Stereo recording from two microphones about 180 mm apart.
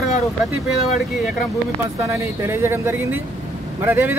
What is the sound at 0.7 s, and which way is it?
Speech, centre (ahead or behind).